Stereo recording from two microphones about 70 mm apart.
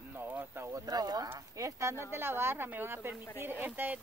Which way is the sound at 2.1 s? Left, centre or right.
Right.